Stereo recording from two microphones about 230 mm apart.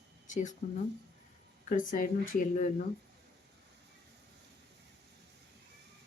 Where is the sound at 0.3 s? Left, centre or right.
Left.